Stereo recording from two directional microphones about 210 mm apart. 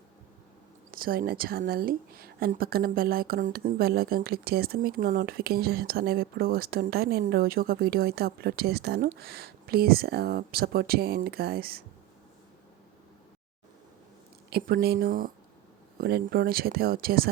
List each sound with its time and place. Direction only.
0.9 s speech: 45° right (ahead or behind)
14.5 s speech: 45° right (ahead or behind)